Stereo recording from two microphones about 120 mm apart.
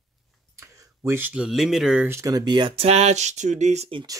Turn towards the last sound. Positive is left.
turn(degrees=-70)  # may be behind; listen again after turning